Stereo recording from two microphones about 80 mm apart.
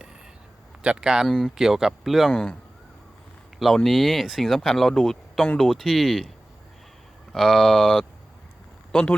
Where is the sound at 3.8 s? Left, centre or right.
Centre.